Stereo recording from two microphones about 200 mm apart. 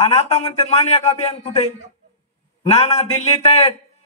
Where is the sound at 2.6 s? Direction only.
35° left (ahead or behind).